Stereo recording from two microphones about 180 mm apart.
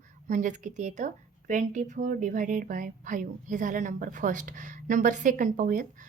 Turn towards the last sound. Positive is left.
turn(degrees=-45)  # may be behind; listen again after turning